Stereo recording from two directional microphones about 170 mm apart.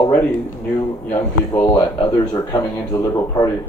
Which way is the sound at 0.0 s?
15° left (ahead or behind).